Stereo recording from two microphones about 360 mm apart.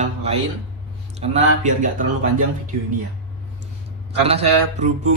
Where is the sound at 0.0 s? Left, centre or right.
Centre.